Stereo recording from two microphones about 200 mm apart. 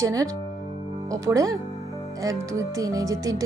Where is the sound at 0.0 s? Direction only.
15° right (ahead or behind).